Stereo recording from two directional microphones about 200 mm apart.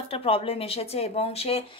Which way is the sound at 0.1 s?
30° left (ahead or behind).